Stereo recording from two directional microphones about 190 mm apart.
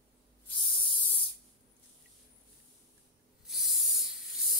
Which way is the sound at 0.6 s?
25° left (ahead or behind).